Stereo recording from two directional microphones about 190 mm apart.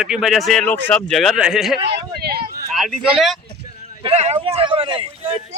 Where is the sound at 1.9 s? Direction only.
55° right (ahead or behind).